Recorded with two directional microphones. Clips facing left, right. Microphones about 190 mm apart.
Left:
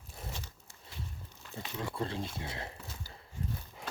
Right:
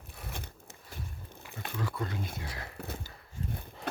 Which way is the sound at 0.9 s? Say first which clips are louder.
Right 1 dB; 55° right (ahead or behind).